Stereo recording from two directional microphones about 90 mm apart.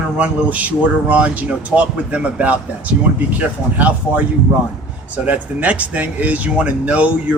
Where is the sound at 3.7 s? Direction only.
15° right (ahead or behind).